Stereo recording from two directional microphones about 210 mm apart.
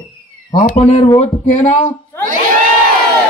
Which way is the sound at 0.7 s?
25° left (ahead or behind).